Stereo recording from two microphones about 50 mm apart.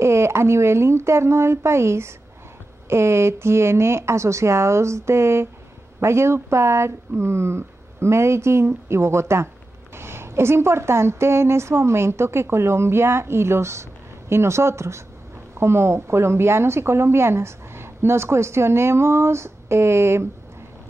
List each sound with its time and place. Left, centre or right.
0.0 s speech: right
15.5 s speech: right